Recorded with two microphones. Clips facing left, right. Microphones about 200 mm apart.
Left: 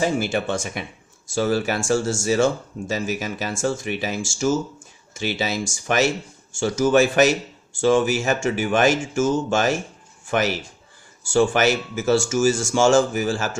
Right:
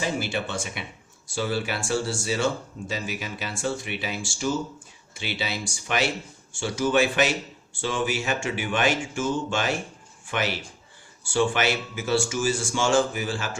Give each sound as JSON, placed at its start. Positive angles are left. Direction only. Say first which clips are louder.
{"t": 0.0, "sound": "speech", "louder": "left 6 dB", "side_deg": 45}